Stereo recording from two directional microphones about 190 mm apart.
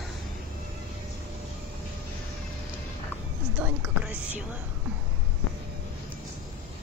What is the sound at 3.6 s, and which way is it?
Music, 10° right (ahead or behind).